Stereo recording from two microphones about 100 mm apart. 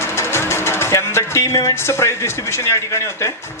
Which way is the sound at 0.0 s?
25° left (ahead or behind).